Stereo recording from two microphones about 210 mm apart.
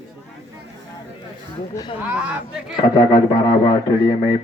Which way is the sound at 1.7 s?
20° left (ahead or behind).